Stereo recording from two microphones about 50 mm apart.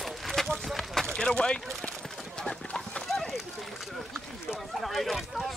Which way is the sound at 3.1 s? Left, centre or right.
Centre.